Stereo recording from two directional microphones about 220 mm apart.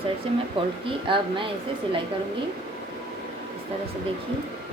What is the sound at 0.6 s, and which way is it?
Speech, 25° right (ahead or behind).